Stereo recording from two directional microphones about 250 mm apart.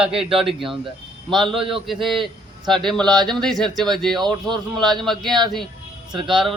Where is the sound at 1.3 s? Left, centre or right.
Centre.